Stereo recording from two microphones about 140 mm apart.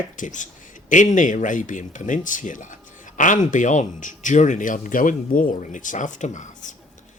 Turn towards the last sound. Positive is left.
turn(degrees=65)  # may be behind; listen again after turning